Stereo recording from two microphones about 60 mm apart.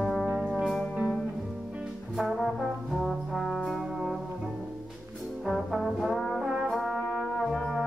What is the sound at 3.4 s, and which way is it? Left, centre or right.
Brass instrument, centre.